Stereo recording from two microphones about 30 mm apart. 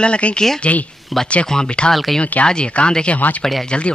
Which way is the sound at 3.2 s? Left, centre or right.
Left.